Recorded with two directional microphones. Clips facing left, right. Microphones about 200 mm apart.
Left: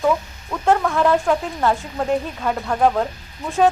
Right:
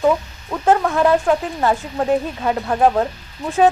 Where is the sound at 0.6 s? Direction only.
5° right (ahead or behind).